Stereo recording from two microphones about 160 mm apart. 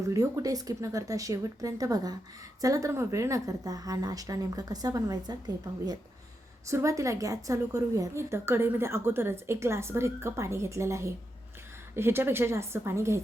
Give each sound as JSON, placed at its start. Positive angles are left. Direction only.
{"t": 0.0, "sound": "a woman's voice", "side_deg": -20}